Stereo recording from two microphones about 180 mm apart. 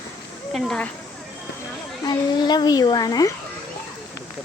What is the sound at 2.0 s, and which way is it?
A woman's voice, 25° left (ahead or behind).